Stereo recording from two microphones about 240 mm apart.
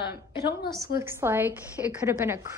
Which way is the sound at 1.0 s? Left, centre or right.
Centre.